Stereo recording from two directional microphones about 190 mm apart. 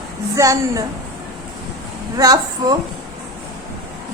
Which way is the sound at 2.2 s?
20° right (ahead or behind).